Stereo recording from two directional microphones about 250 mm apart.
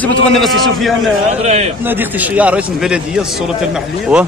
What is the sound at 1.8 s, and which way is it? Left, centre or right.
A man's voice, centre.